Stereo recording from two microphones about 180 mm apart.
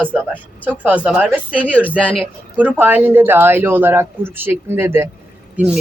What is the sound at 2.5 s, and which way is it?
Speech, 10° right (ahead or behind).